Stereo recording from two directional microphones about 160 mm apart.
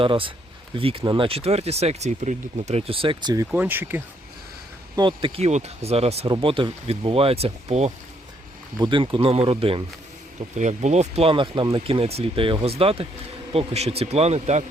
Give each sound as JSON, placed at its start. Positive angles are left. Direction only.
{"t": 0.0, "sound": "speech", "side_deg": -35}
{"t": 3.3, "sound": "speech", "side_deg": -10}
{"t": 4.9, "sound": "speech", "side_deg": -30}
{"t": 8.8, "sound": "speech", "side_deg": -30}
{"t": 10.6, "sound": "speech", "side_deg": -45}